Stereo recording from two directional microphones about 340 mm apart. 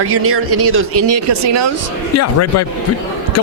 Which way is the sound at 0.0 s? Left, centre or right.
Right.